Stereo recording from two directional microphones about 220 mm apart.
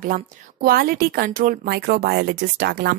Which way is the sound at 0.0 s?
40° right (ahead or behind).